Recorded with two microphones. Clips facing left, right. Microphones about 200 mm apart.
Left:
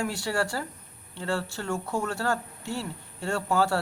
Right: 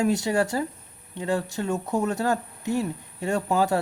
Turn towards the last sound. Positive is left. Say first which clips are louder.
# right 3 dB
turn(degrees=-20)  # may be behind; listen again after turning